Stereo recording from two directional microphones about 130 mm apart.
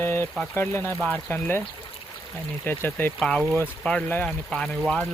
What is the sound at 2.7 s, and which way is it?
Speech, 15° left (ahead or behind).